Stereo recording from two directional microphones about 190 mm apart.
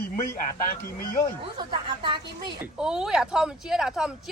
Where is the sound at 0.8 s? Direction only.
50° left (ahead or behind).